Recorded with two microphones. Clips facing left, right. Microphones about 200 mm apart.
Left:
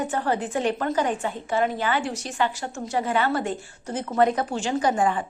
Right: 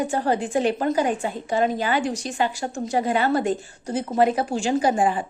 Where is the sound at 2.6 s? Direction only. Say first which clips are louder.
Right 3 dB; 35° right (ahead or behind).